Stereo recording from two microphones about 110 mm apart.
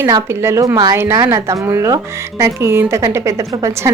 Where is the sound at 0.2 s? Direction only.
25° right (ahead or behind).